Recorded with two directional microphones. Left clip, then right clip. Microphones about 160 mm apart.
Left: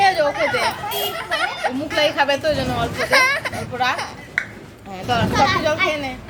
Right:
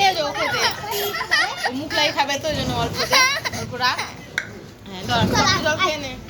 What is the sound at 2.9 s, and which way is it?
Speech, 5° left (ahead or behind).